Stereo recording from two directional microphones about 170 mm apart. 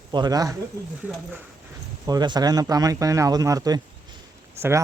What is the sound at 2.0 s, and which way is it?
Speech, 25° right (ahead or behind).